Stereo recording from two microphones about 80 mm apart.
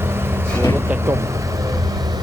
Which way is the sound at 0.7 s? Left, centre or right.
Right.